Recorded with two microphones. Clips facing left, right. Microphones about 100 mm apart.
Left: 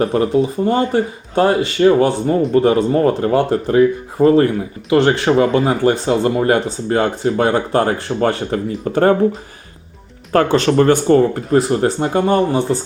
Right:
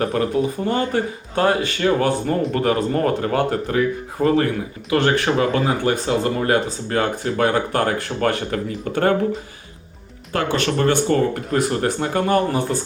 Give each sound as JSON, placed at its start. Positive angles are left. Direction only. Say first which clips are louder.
{"t": 0.0, "sound": "speech", "louder": "left 5 dB", "side_deg": 30}
{"t": 10.3, "sound": "speech", "louder": "left 8 dB", "side_deg": 35}